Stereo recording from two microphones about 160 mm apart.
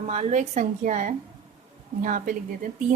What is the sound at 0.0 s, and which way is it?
A woman's voice, 45° right (ahead or behind).